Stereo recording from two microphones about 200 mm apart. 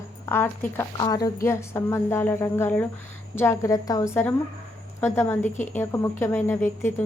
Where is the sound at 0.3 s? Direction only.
10° left (ahead or behind).